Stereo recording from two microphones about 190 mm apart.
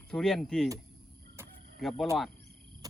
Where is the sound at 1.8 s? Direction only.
Centre (ahead or behind).